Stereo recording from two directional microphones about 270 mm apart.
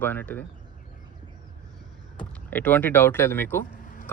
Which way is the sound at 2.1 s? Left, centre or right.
Centre.